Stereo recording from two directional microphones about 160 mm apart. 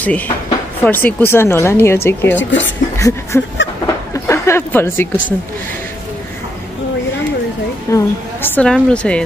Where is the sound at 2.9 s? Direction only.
15° left (ahead or behind).